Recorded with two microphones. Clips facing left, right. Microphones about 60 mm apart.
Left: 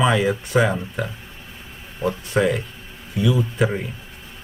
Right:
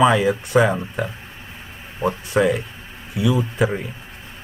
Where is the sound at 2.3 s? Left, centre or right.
Centre.